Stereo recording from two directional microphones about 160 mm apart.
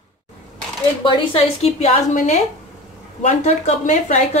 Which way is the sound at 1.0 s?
30° left (ahead or behind).